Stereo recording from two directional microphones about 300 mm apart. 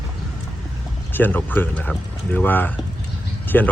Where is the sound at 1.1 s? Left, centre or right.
Centre.